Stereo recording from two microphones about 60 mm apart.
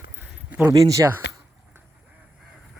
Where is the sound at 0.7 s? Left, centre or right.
Right.